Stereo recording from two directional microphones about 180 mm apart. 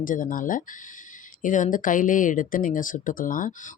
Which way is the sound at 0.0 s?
50° left (ahead or behind).